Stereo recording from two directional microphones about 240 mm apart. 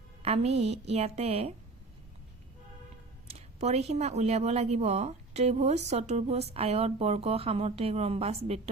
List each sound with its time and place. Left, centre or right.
0.2 s a woman's voice: right
3.3 s a woman's voice: right